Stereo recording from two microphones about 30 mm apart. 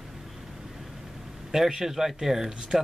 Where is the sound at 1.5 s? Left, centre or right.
Centre.